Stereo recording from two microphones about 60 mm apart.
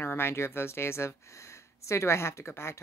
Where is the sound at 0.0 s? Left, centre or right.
Left.